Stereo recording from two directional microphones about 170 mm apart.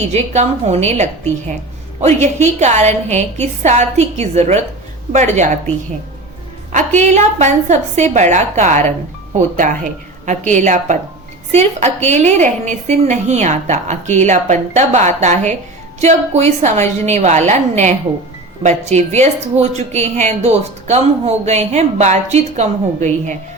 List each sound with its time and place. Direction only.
0.1 s a woman's voice: 40° right (ahead or behind)
6.7 s a woman's voice: 45° right (ahead or behind)
12.0 s a woman's voice: 45° right (ahead or behind)